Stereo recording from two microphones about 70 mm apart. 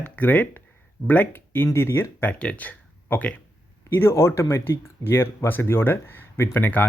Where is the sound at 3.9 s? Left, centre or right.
Left.